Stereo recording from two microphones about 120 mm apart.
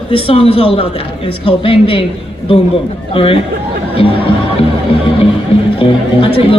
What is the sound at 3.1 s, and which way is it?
Speech, 50° left (ahead or behind).